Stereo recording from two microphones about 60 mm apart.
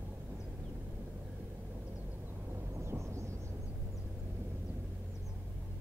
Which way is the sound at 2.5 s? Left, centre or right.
Right.